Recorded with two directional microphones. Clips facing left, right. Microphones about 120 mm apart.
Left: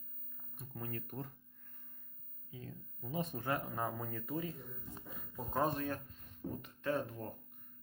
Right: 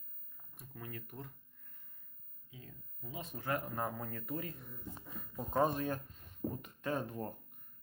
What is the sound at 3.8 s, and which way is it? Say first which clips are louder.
Speech: even; 5° left (ahead or behind).